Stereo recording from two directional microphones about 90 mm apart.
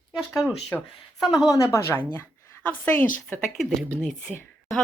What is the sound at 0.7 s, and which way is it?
Speech, 20° left (ahead or behind).